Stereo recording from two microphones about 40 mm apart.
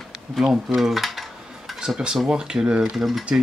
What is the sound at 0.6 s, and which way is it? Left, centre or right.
Cutlery, centre.